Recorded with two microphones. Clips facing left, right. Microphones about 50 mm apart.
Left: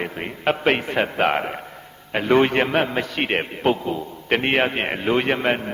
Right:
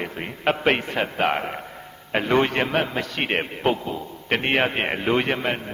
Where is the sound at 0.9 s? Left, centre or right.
Centre.